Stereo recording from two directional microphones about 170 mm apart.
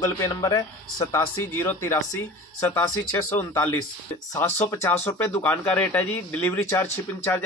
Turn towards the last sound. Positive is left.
turn(degrees=15)  # may be behind; listen again after turning